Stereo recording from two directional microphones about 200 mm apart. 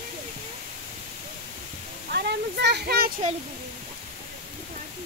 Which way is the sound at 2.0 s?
55° right (ahead or behind).